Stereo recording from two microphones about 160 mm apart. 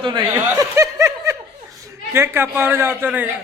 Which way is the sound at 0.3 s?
20° right (ahead or behind).